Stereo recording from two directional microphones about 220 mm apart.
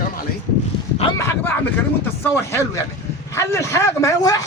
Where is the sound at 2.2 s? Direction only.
10° left (ahead or behind).